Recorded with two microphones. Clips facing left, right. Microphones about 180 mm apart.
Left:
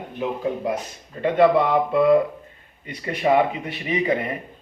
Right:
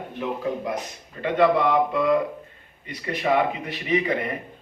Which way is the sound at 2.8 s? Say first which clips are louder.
Left 2 dB; 30° left (ahead or behind).